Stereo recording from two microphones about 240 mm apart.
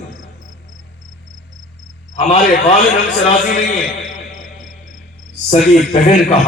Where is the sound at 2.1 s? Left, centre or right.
Left.